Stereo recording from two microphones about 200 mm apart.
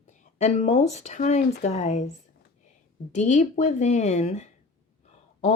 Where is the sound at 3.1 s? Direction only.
35° left (ahead or behind).